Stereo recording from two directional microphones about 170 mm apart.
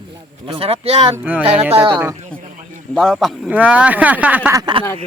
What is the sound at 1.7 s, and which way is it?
Speech, 30° right (ahead or behind).